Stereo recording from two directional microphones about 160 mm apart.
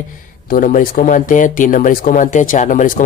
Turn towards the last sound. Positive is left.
turn(degrees=55)  # may be behind; listen again after turning